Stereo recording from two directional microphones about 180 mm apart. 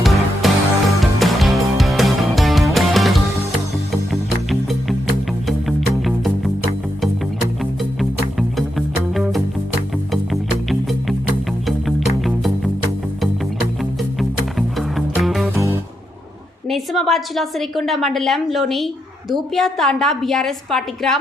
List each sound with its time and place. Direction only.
0.0 s music: centre (ahead or behind)
6.1 s music: centre (ahead or behind)
7.6 s music: centre (ahead or behind)
11.6 s music: centre (ahead or behind)
14.2 s music: centre (ahead or behind)
15.5 s music: 15° right (ahead or behind)
16.6 s a woman's voice: centre (ahead or behind)